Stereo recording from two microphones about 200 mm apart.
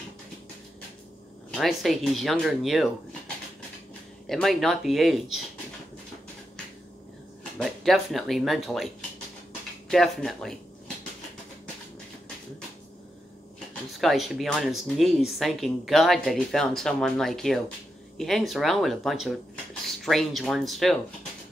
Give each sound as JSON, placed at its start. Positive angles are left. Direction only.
{"t": 1.5, "sound": "speech", "side_deg": 0}
{"t": 4.3, "sound": "speech", "side_deg": 0}
{"t": 7.5, "sound": "speech", "side_deg": 0}
{"t": 13.9, "sound": "speech", "side_deg": 0}